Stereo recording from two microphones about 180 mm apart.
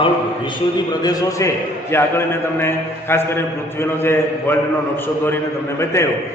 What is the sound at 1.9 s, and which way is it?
Speech, 15° left (ahead or behind).